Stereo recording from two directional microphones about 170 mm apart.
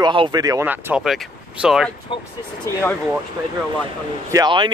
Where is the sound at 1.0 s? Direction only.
Centre (ahead or behind).